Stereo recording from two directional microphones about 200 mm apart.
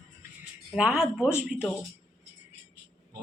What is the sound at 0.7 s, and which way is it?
Speech, 5° right (ahead or behind).